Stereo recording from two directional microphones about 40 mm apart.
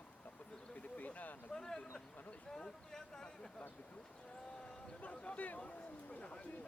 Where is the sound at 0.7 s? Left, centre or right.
Left.